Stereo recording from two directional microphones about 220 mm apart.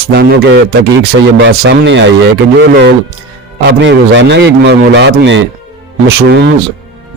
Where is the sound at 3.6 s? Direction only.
50° right (ahead or behind).